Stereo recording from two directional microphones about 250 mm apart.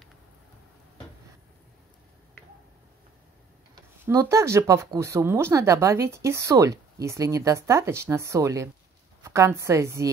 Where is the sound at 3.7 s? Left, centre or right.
Centre.